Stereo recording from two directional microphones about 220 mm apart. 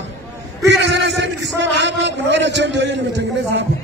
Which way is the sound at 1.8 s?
55° right (ahead or behind).